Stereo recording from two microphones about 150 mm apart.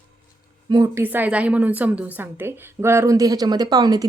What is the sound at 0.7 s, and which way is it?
A woman's voice, 20° right (ahead or behind).